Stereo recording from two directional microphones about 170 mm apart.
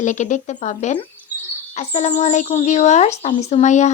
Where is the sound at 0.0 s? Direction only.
45° left (ahead or behind).